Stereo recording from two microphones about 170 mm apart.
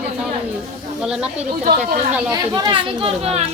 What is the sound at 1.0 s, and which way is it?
Speech, 5° right (ahead or behind).